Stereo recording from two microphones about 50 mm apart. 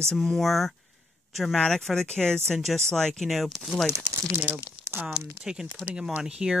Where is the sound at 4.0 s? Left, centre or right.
Right.